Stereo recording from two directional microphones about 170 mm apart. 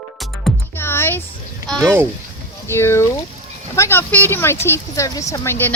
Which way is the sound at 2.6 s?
15° left (ahead or behind).